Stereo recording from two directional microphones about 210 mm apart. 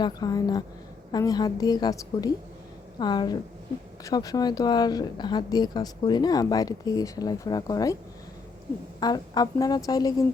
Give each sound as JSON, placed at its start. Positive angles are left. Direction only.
{"t": 0.0, "sound": "a woman's voice", "side_deg": 20}
{"t": 9.0, "sound": "speech", "side_deg": 20}